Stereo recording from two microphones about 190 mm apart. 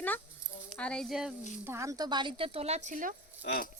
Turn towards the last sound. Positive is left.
turn(degrees=50)  # may be behind; listen again after turning